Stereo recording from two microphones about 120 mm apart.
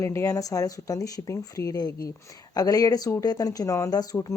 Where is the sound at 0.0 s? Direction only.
25° left (ahead or behind).